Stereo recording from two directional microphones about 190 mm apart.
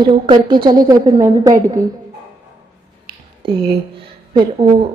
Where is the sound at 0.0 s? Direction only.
25° right (ahead or behind).